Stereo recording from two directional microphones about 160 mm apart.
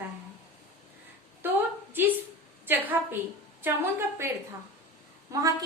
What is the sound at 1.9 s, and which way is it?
A woman's voice, 10° right (ahead or behind).